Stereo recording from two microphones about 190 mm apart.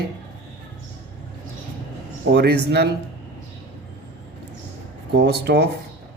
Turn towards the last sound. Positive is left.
turn(degrees=-60)  # may be behind; listen again after turning